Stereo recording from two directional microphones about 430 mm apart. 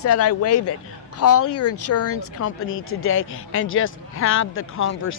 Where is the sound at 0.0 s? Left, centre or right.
Left.